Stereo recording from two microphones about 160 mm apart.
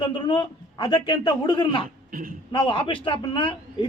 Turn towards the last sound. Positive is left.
turn(degrees=30)  # may be behind; listen again after turning